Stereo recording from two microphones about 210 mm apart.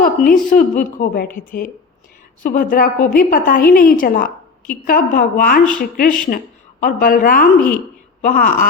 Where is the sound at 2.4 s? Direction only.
40° left (ahead or behind).